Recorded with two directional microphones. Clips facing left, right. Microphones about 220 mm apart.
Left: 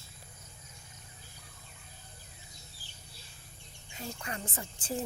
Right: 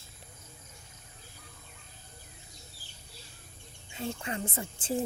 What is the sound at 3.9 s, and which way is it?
Speech, 25° right (ahead or behind).